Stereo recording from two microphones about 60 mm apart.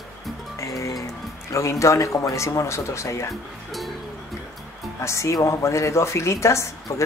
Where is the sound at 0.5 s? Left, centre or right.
Left.